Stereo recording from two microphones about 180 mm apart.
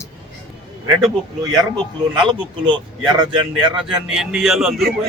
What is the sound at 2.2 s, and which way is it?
Speech, 25° right (ahead or behind).